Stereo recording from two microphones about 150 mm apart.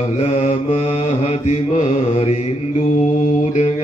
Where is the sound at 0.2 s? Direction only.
45° left (ahead or behind).